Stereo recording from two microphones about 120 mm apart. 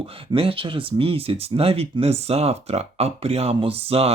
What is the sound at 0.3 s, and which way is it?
Speech, 50° right (ahead or behind).